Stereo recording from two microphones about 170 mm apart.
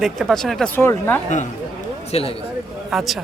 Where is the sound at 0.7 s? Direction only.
15° left (ahead or behind).